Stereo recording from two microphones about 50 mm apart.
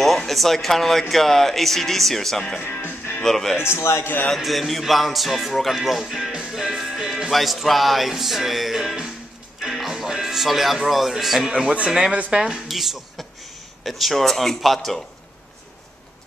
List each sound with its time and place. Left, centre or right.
0.3 s speech: centre
2.7 s music: left
3.2 s speech: centre
3.6 s a man's voice: left
4.0 s a man's voice: left
4.4 s speech: centre
6.5 s music: centre
12.3 s speech: centre
12.6 s speech: centre